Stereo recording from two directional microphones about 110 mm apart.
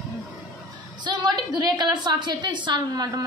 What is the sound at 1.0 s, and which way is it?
A woman's voice, 40° right (ahead or behind).